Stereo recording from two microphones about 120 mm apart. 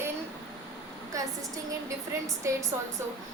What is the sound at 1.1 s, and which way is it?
A woman's voice, 25° right (ahead or behind).